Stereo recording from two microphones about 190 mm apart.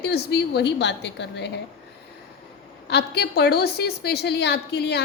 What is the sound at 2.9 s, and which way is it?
A woman's voice, 60° left (ahead or behind).